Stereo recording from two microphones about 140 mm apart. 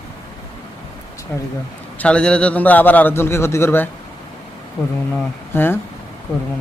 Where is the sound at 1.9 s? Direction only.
10° left (ahead or behind).